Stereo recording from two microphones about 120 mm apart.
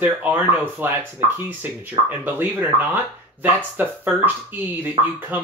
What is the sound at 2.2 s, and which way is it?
Speech, 15° right (ahead or behind).